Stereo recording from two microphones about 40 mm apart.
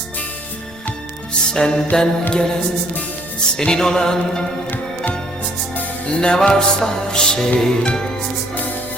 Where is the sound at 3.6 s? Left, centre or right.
Centre.